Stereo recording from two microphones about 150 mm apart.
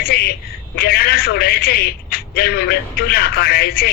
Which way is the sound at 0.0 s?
90° left.